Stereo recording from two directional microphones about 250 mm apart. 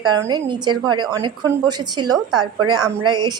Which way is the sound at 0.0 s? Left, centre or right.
Centre.